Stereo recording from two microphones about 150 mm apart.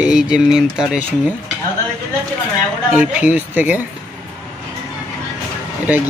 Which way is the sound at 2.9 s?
10° right (ahead or behind).